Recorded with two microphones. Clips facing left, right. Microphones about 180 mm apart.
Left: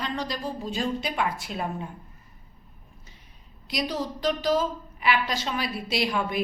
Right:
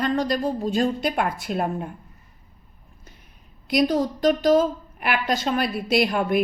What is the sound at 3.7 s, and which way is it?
A woman's voice, 50° right (ahead or behind).